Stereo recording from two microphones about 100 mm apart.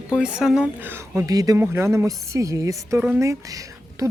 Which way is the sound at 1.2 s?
35° right (ahead or behind).